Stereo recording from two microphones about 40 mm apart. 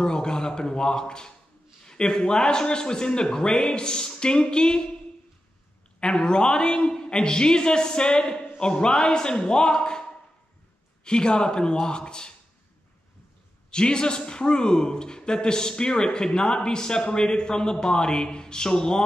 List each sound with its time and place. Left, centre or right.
0.0 s speech: centre
5.9 s speech: left
11.1 s speech: left
13.7 s speech: left